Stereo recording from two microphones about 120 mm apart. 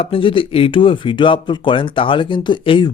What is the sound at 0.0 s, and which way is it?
Speech, 50° left (ahead or behind).